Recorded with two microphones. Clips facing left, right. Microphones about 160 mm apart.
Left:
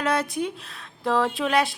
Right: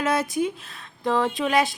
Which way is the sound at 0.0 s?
Centre (ahead or behind).